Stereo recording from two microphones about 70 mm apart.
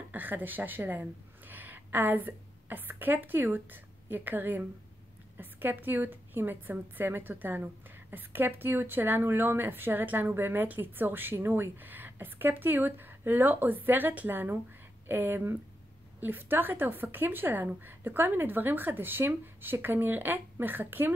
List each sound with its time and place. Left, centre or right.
0.1 s a woman's voice: right